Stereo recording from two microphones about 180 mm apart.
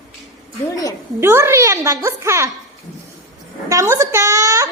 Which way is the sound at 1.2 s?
10° right (ahead or behind).